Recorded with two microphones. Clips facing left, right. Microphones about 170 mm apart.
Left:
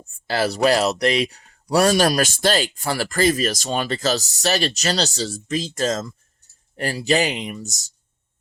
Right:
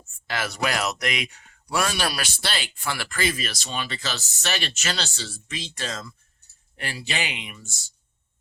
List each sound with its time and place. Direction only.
0.0 s speech: 35° left (ahead or behind)